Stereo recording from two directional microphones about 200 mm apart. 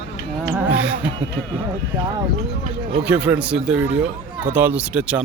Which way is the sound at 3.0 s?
5° right (ahead or behind).